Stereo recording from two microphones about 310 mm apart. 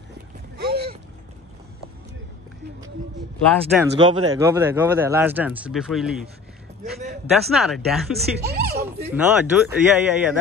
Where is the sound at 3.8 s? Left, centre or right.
Centre.